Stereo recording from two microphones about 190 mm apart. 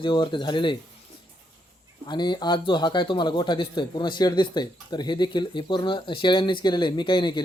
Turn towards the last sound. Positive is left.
turn(degrees=25)  # may be behind; listen again after turning